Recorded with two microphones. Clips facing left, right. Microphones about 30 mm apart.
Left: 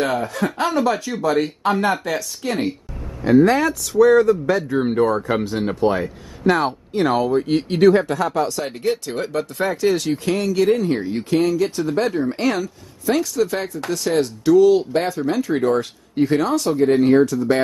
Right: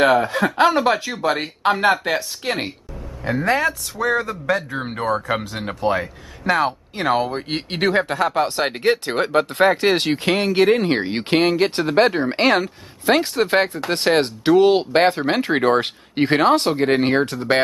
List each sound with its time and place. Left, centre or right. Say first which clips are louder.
0.0 s speech: right 5 dB; right
3.3 s speech: left 7 dB; right
4.3 s speech: left 4 dB; right
5.6 s speech: left 2 dB; centre
7.2 s speech: left 7 dB; right